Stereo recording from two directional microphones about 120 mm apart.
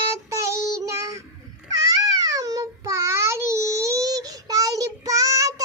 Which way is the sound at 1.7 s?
30° right (ahead or behind).